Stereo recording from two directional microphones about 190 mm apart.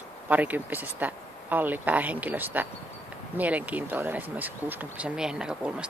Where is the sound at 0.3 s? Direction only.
10° right (ahead or behind).